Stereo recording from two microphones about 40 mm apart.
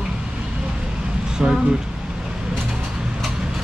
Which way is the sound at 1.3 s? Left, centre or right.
Centre.